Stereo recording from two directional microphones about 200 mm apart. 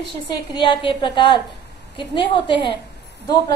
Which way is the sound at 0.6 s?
25° left (ahead or behind).